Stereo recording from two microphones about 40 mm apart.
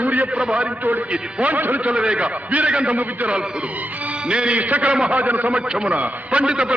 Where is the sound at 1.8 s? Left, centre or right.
Right.